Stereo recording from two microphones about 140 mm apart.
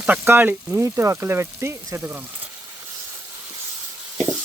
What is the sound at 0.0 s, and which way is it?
Speech, 10° right (ahead or behind).